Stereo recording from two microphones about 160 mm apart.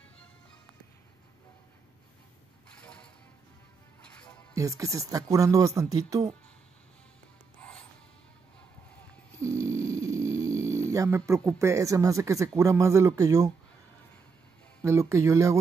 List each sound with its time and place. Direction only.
2.8 s mechanisms: 5° left (ahead or behind)
4.1 s music: 5° left (ahead or behind)
4.6 s speech: 20° right (ahead or behind)
7.6 s music: 10° left (ahead or behind)
9.4 s a sound: 20° right (ahead or behind)
10.0 s speech: 20° right (ahead or behind)
14.8 s speech: 20° right (ahead or behind)